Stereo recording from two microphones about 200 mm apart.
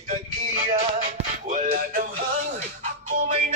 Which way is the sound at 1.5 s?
45° right (ahead or behind).